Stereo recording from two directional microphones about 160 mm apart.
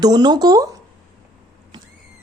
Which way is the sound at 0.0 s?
25° right (ahead or behind).